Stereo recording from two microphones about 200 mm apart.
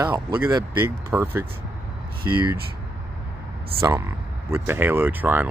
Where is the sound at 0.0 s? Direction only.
15° right (ahead or behind).